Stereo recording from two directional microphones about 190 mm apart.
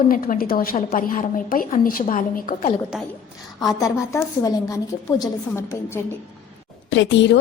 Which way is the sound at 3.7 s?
15° left (ahead or behind).